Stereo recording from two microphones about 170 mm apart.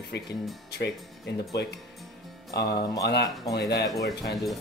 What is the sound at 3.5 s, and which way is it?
Speech, 85° left.